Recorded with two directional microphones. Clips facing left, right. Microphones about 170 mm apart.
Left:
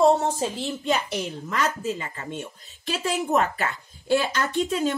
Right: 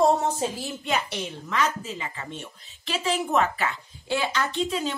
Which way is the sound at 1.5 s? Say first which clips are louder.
Left 1 dB; 45° left (ahead or behind).